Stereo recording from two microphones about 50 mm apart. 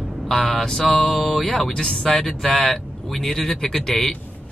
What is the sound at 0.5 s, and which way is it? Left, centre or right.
Speech, centre.